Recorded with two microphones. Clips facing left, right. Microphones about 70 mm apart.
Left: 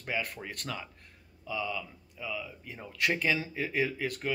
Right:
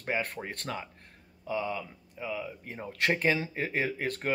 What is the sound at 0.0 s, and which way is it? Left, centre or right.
Speech, right.